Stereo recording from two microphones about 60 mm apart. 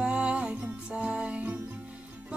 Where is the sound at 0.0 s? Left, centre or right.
Centre.